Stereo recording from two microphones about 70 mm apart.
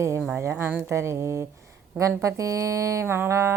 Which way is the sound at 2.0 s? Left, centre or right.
Right.